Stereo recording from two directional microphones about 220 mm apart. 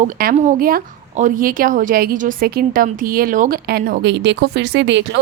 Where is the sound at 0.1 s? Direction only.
40° right (ahead or behind).